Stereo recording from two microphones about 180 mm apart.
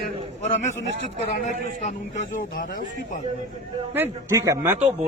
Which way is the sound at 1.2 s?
40° left (ahead or behind).